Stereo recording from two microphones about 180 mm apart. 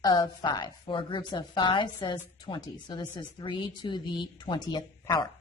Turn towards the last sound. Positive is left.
turn(degrees=25)  # may be behind; listen again after turning